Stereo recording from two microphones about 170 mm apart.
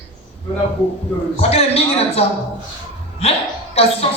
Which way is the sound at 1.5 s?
35° left (ahead or behind).